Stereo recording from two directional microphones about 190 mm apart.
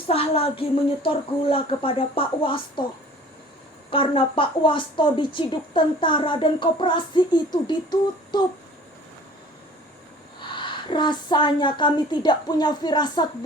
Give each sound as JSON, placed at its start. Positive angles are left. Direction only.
{"t": 0.1, "sound": "a woman's voice", "side_deg": 30}
{"t": 3.8, "sound": "a woman's voice", "side_deg": 30}
{"t": 10.5, "sound": "a woman's voice", "side_deg": 25}